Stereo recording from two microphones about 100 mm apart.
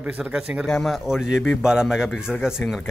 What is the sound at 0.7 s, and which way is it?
Speech, 5° left (ahead or behind).